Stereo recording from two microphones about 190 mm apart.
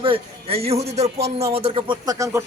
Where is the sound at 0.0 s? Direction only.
30° right (ahead or behind).